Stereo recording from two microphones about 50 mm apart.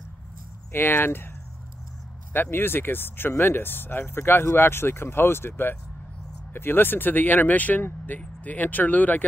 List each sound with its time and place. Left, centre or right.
0.7 s speech: left
2.3 s speech: left
6.5 s speech: left